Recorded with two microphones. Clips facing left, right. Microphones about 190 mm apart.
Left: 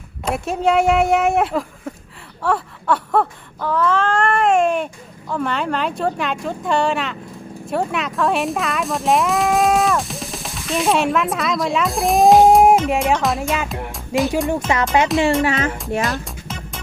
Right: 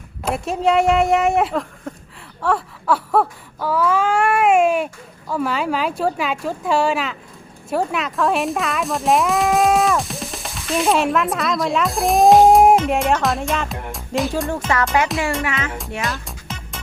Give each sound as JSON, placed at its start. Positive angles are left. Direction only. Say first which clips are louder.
{"t": 0.3, "sound": "speech", "louder": "even", "side_deg": 0}
{"t": 2.4, "sound": "wail", "louder": "even", "side_deg": 0}
{"t": 5.3, "sound": "speech", "louder": "right 1 dB", "side_deg": -5}
{"t": 15.0, "sound": "speech", "louder": "left 4 dB", "side_deg": 25}
{"t": 15.4, "sound": "speech", "louder": "left 6 dB", "side_deg": 35}
{"t": 16.0, "sound": "music", "louder": "left 4 dB", "side_deg": 0}